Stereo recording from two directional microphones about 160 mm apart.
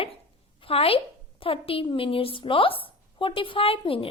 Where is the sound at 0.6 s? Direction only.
35° left (ahead or behind).